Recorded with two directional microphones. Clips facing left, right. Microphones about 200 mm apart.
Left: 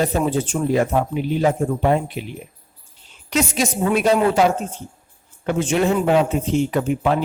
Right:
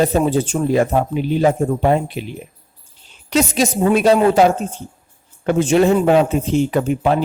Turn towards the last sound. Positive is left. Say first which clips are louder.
# right 3 dB
turn(degrees=-35)  # may be behind; listen again after turning